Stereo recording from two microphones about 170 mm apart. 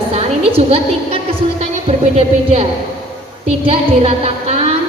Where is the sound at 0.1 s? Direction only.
35° right (ahead or behind).